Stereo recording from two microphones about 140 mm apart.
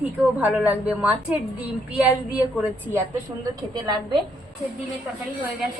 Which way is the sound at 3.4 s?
30° right (ahead or behind).